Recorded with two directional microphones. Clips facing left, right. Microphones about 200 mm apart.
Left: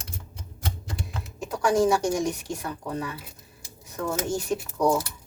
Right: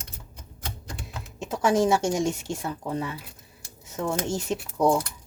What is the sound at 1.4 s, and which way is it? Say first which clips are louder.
A woman's voice: even; 25° right (ahead or behind).